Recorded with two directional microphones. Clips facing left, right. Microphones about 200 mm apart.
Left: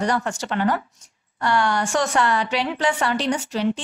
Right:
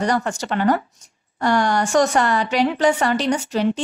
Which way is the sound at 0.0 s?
40° right (ahead or behind).